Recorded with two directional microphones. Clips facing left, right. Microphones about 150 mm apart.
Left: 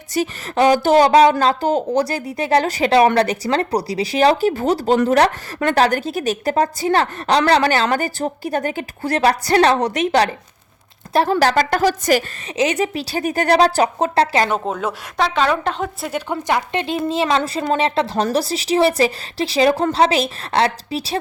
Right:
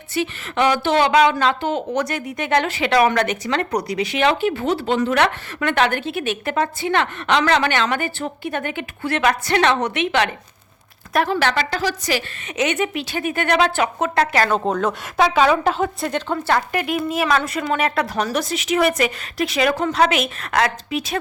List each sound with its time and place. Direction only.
0.1 s a woman's voice: 40° left (ahead or behind)
12.5 s a woman's voice: 35° left (ahead or behind)
14.5 s speech: 5° left (ahead or behind)
15.2 s speech: 5° right (ahead or behind)
16.3 s a woman's voice: 15° left (ahead or behind)
16.7 s a woman's voice: 30° left (ahead or behind)